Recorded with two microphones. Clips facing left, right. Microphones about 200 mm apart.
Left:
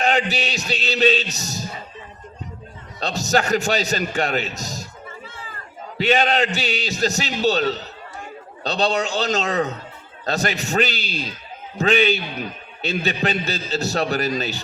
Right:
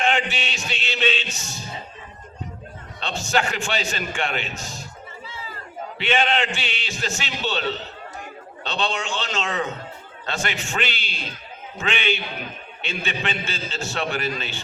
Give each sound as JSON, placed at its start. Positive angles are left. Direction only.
{"t": 0.0, "sound": "a man's voice", "side_deg": 40}
{"t": 3.0, "sound": "a man's voice", "side_deg": 40}
{"t": 6.0, "sound": "a man's voice", "side_deg": 40}